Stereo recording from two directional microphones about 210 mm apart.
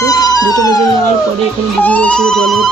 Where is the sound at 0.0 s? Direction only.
15° left (ahead or behind).